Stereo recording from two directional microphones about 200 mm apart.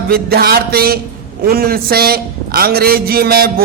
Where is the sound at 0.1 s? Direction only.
50° right (ahead or behind).